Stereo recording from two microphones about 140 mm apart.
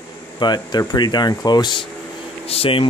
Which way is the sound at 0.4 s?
30° left (ahead or behind).